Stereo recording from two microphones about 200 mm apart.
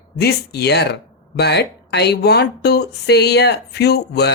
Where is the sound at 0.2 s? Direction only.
55° left (ahead or behind).